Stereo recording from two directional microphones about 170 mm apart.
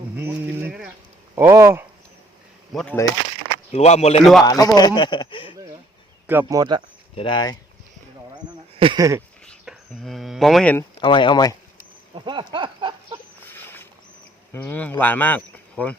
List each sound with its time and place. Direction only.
0.2 s a sound: 15° right (ahead or behind)
1.4 s speech: 20° right (ahead or behind)
2.7 s speech: 5° left (ahead or behind)
3.7 s speech: 40° left (ahead or behind)
4.4 s speech: 20° left (ahead or behind)
6.4 s speech: 25° right (ahead or behind)
7.2 s speech: 25° left (ahead or behind)
8.8 s speech: 25° right (ahead or behind)
9.6 s speech: centre (ahead or behind)
11.0 s speech: 30° left (ahead or behind)
12.1 s speech: 30° right (ahead or behind)
13.5 s boat: 10° left (ahead or behind)
14.5 s speech: 10° left (ahead or behind)